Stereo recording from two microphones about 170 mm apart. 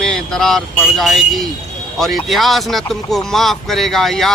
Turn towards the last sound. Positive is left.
turn(degrees=0)  # may be behind; listen again after turning